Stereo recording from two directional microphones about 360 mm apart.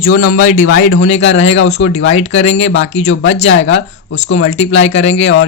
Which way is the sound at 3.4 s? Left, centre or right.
Left.